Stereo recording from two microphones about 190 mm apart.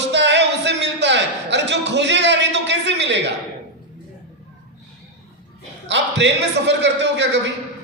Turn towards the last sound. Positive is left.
turn(degrees=-70)  # may be behind; listen again after turning